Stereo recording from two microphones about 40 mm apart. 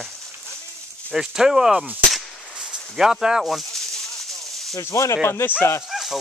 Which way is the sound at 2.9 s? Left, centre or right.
Centre.